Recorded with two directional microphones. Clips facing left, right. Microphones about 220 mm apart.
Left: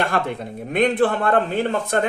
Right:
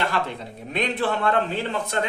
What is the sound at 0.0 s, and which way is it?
A man's voice, 50° left (ahead or behind).